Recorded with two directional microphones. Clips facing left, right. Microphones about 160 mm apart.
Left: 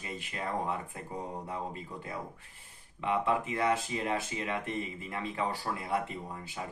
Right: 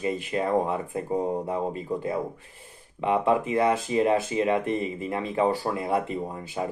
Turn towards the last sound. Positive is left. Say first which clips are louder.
# right 10 dB
turn(degrees=-25)  # may be behind; listen again after turning